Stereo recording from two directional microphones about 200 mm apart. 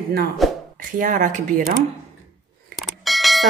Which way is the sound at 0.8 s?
40° right (ahead or behind).